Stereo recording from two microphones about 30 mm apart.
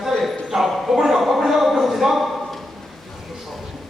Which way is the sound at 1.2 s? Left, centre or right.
Centre.